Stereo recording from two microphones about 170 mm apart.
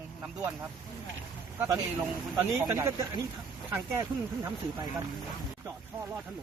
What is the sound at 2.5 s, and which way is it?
Speech, 15° right (ahead or behind).